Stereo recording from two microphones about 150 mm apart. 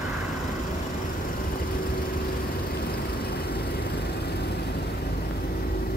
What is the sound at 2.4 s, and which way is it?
Vehicle, 90° left.